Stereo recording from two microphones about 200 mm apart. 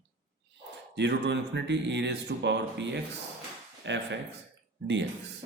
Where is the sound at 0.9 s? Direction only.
60° right (ahead or behind).